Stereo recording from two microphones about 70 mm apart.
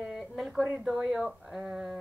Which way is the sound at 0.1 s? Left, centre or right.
Centre.